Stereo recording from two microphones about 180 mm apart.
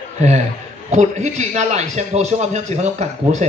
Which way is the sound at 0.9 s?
40° right (ahead or behind).